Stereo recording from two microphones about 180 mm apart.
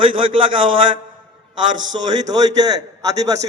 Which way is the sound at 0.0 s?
30° right (ahead or behind).